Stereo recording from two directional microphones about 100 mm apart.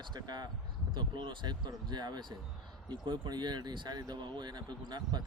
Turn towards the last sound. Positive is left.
turn(degrees=-45)  # may be behind; listen again after turning